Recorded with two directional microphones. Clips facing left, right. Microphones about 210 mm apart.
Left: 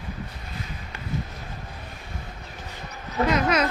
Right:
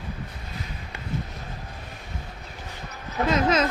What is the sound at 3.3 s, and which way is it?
Speech, 25° right (ahead or behind).